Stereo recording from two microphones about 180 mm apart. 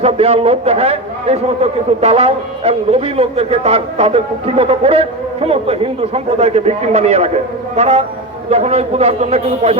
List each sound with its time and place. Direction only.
0.0 s a man's voice: 35° right (ahead or behind)